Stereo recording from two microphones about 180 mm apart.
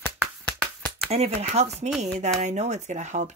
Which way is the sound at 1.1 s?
35° right (ahead or behind).